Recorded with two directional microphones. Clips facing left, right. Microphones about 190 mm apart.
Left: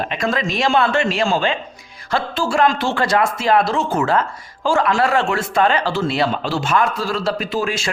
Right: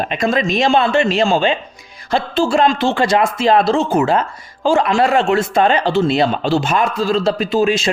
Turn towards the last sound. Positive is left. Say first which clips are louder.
# right 6 dB
turn(degrees=-20)  # may be behind; listen again after turning